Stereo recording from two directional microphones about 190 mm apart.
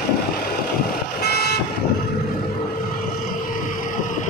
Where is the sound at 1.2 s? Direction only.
55° left (ahead or behind).